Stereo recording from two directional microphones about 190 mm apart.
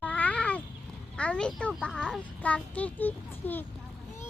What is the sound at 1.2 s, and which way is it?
A child's voice, 5° left (ahead or behind).